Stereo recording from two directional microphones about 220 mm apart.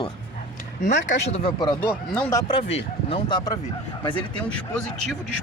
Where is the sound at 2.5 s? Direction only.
25° left (ahead or behind).